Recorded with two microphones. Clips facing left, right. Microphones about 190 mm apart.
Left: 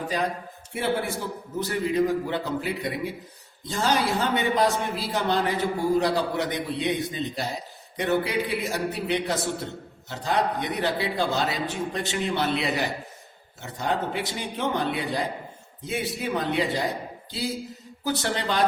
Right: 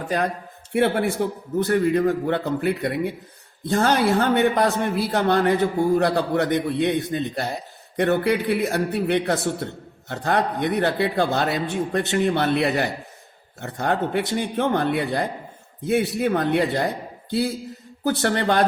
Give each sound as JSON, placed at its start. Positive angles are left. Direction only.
{"t": 0.1, "sound": "a man's voice", "side_deg": -55}